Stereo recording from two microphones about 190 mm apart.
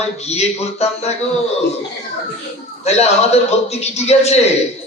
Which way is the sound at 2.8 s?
35° left (ahead or behind).